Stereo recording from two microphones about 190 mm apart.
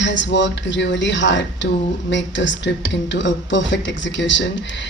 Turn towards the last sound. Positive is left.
turn(degrees=75)  # may be behind; listen again after turning